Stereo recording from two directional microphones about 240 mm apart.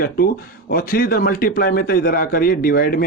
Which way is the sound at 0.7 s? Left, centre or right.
Left.